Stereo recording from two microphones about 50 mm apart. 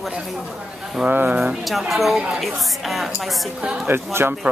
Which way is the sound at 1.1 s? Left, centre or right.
Right.